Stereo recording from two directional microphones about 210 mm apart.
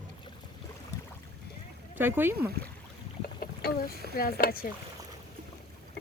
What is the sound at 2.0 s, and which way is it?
Speech, 10° right (ahead or behind).